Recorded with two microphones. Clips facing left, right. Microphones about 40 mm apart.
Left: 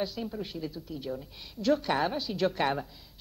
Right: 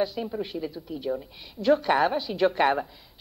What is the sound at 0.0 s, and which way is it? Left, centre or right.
Speech, centre.